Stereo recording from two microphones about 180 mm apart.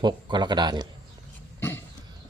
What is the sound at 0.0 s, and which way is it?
Speech, 25° right (ahead or behind).